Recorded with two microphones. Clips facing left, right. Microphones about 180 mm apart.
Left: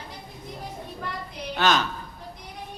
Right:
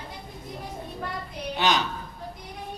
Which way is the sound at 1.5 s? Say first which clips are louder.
Left 2 dB; 15° right (ahead or behind).